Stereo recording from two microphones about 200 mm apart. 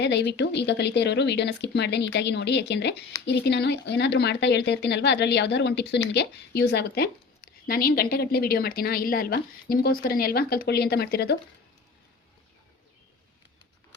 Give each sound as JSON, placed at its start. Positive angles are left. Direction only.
{"t": 0.0, "sound": "a woman's voice", "side_deg": 60}